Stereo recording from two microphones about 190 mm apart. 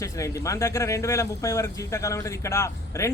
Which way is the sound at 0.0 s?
15° left (ahead or behind).